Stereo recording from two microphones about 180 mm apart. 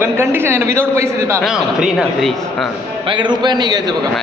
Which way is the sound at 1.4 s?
Centre (ahead or behind).